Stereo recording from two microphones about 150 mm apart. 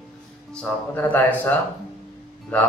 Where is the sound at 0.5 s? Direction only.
10° left (ahead or behind).